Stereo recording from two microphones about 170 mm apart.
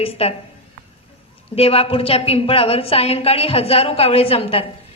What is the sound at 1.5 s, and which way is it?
A woman's voice, 35° left (ahead or behind).